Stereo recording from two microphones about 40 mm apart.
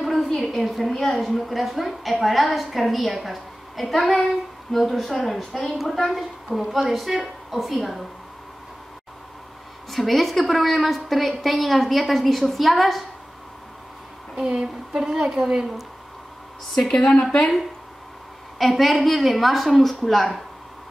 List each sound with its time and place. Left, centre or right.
0.0 s a sound: centre
0.5 s a woman's voice: centre
9.8 s a woman's voice: centre
14.3 s a woman's voice: centre
16.7 s a woman's voice: centre
18.6 s a woman's voice: centre